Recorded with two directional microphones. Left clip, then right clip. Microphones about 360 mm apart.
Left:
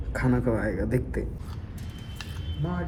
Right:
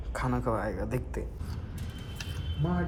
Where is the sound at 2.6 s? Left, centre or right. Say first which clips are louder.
Even; centre.